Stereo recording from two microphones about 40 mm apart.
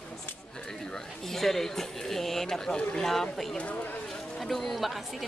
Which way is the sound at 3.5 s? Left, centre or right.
Left.